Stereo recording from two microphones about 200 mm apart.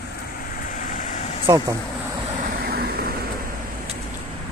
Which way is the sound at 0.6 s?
40° left (ahead or behind).